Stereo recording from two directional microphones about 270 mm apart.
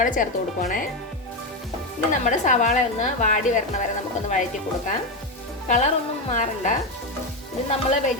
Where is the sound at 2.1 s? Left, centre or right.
Left.